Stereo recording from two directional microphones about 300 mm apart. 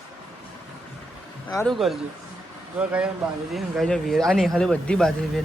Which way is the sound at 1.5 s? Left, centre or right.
Centre.